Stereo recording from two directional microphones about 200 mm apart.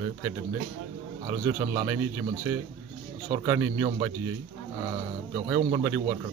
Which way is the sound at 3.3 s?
20° right (ahead or behind).